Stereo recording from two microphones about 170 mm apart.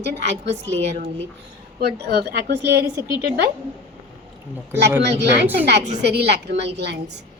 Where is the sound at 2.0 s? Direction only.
85° right.